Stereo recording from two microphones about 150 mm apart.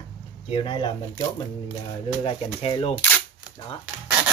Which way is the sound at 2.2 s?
40° left (ahead or behind).